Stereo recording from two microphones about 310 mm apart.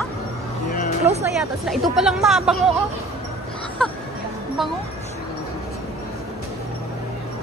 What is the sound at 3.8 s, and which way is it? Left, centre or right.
Speech, centre.